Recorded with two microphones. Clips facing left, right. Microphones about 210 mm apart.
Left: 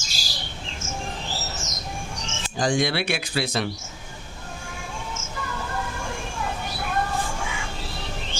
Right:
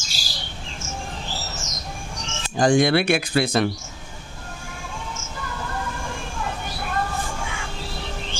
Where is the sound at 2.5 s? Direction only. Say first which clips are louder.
Right 6 dB; 55° right (ahead or behind).